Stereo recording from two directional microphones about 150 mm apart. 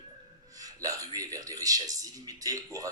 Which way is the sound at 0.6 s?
25° right (ahead or behind).